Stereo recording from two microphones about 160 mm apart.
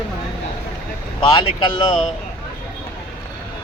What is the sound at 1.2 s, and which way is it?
Speech, 30° left (ahead or behind).